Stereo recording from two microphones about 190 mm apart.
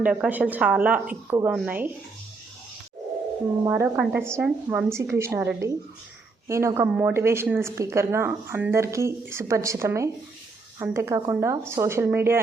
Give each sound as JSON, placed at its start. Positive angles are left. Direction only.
{"t": 0.0, "sound": "speech", "side_deg": -5}
{"t": 3.6, "sound": "speech", "side_deg": -10}